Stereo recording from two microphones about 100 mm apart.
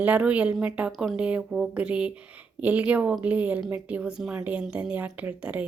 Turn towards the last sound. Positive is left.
turn(degrees=-15)  # may be behind; listen again after turning